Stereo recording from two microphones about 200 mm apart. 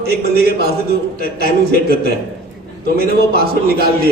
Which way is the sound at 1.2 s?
45° left (ahead or behind).